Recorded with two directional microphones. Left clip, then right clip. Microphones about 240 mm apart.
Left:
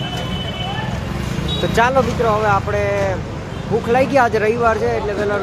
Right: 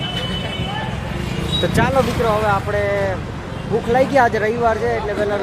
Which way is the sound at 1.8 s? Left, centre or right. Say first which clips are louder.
Left 5 dB; centre.